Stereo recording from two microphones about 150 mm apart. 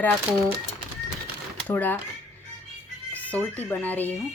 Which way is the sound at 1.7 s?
10° left (ahead or behind).